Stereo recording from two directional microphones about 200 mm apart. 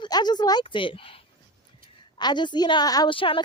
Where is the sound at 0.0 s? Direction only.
20° left (ahead or behind).